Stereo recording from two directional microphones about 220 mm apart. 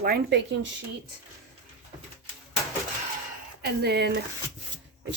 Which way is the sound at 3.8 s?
50° right (ahead or behind).